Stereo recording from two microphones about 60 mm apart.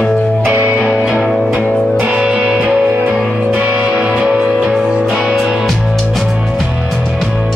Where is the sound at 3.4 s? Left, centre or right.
Right; by 7.5 s centre.